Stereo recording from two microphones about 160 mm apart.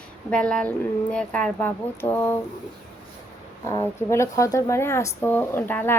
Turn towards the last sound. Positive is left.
turn(degrees=10)  # may be behind; listen again after turning